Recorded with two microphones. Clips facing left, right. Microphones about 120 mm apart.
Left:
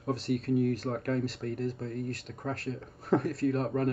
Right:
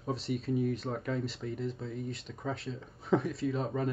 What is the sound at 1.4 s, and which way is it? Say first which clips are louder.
Speech: left 3 dB; 15° right (ahead or behind).